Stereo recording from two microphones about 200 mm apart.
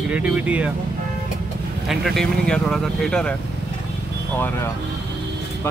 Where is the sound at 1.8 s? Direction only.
Centre (ahead or behind).